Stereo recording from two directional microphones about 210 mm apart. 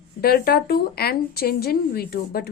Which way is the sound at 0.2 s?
45° left (ahead or behind).